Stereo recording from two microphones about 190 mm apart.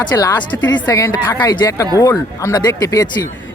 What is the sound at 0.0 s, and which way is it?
Speech, 20° left (ahead or behind).